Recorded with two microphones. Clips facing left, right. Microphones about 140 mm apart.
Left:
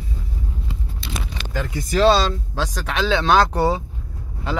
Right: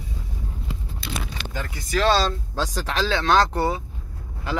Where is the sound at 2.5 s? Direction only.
10° left (ahead or behind).